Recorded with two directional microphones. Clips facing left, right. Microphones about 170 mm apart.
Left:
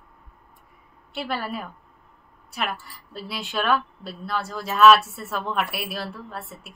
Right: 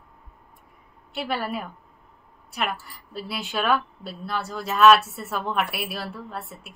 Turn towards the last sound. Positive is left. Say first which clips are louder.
# right 1 dB
turn(degrees=0)  # may be behind; listen again after turning